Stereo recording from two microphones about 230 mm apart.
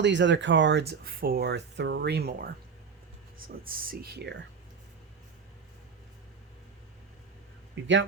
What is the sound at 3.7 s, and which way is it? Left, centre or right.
Speech, right.